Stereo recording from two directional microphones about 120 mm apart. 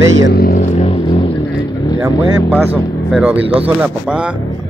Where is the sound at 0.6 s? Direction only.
90° left.